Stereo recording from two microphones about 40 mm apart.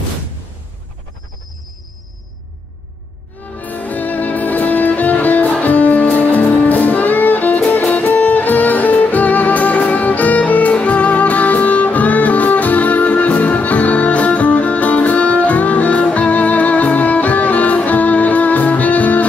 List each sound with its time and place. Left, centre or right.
3.5 s music: left